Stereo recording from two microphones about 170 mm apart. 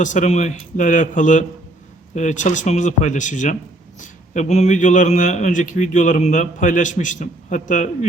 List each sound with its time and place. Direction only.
0.0 s a man's voice: 45° left (ahead or behind)